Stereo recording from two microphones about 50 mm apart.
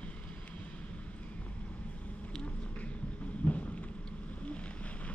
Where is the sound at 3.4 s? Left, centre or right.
Left.